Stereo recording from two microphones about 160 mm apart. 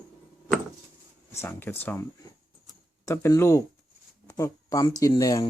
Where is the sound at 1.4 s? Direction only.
10° left (ahead or behind).